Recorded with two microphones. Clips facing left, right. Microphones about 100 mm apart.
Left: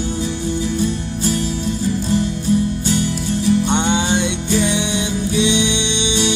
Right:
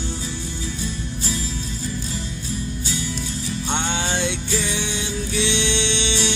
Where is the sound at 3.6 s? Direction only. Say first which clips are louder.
Left 7 dB; 15° left (ahead or behind).